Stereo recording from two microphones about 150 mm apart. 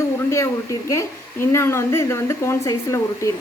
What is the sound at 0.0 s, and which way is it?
A woman's voice, 20° left (ahead or behind).